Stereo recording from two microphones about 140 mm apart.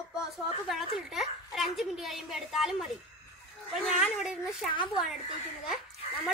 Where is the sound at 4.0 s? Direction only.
Centre (ahead or behind).